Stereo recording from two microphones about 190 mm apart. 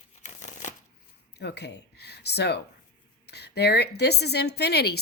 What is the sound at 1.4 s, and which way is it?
A woman's voice, 60° left (ahead or behind).